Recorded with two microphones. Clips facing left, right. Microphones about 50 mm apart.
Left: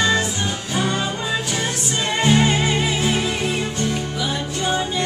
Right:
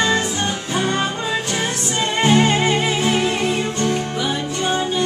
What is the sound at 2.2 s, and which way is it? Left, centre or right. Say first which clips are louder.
Music: right 2 dB; right.